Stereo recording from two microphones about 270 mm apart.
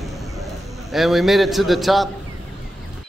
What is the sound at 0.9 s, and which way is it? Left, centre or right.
Speech, centre.